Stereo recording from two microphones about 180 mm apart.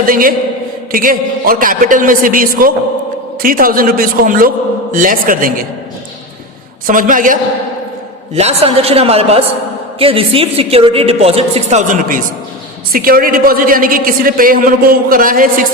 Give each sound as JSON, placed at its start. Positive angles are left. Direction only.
{"t": 0.0, "sound": "a woman's voice", "side_deg": -50}
{"t": 6.8, "sound": "a woman's voice", "side_deg": -50}
{"t": 8.4, "sound": "a woman's voice", "side_deg": -35}